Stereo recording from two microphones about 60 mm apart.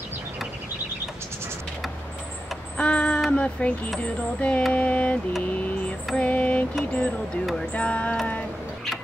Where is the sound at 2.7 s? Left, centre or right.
Centre.